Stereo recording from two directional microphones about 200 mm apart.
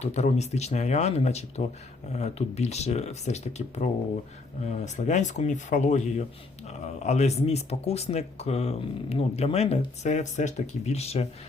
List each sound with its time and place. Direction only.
0.0 s speech: 35° left (ahead or behind)